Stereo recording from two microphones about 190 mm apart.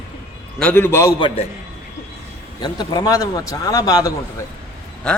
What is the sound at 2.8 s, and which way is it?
A man's voice, 20° left (ahead or behind).